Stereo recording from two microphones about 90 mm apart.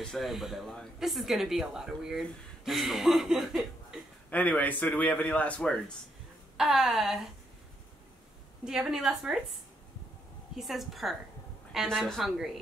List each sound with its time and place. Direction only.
0.0 s speech: centre (ahead or behind)
4.3 s a man's voice: 15° left (ahead or behind)
6.5 s speech: 5° right (ahead or behind)
8.6 s a woman's voice: 5° right (ahead or behind)
10.5 s speech: centre (ahead or behind)